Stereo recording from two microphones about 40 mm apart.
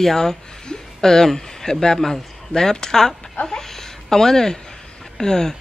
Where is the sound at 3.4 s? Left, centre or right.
Centre.